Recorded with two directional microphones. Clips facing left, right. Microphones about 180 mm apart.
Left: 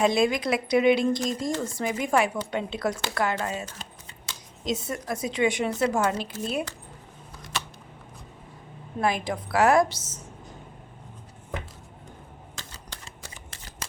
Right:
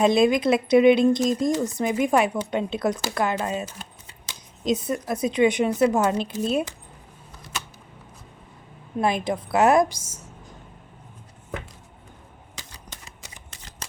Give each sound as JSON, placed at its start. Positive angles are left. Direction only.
{"t": 0.0, "sound": "speech", "side_deg": -20}
{"t": 9.0, "sound": "speech", "side_deg": -20}
{"t": 12.5, "sound": "shuffling cards", "side_deg": -15}